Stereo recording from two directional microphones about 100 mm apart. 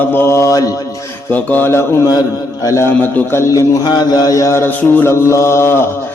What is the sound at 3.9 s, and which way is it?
Mantra, 45° left (ahead or behind).